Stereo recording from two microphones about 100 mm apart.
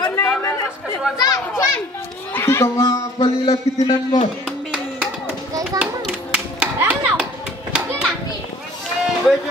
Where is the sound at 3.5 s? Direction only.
40° left (ahead or behind).